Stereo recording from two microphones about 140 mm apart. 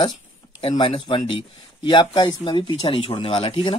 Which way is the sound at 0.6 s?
40° left (ahead or behind).